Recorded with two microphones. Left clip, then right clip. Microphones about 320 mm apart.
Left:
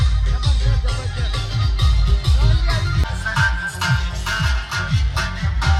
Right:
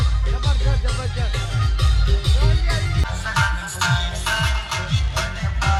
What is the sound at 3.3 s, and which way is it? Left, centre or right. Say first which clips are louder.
Music: left 2 dB; centre.